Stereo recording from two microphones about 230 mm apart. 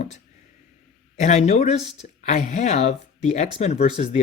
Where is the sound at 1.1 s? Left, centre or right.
Left.